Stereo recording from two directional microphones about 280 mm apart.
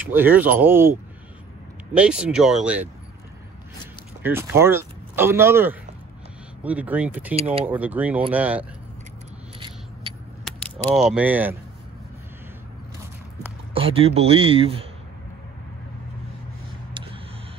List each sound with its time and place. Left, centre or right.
0.0 s speech: centre
2.0 s speech: centre
4.2 s speech: centre
7.3 s speech: right
7.6 s speech: centre
10.1 s vehicle: centre
10.4 s speech: centre
13.7 s speech: centre